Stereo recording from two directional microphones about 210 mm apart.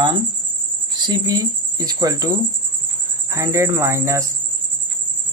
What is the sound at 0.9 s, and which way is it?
Speech, 20° right (ahead or behind).